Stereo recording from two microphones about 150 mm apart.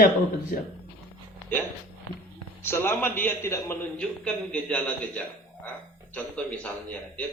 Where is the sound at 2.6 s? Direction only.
15° left (ahead or behind).